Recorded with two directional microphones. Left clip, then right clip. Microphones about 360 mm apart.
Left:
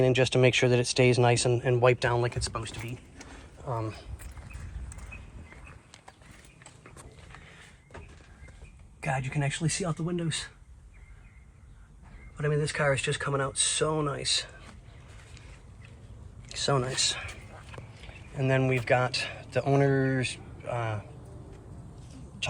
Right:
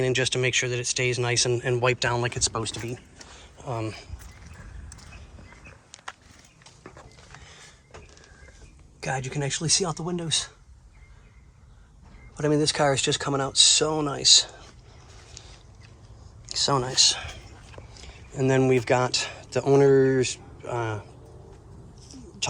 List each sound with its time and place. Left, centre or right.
0.0 s speech: centre
2.4 s speech: centre
3.6 s speech: centre
9.0 s speech: centre
12.4 s speech: centre
16.5 s speech: centre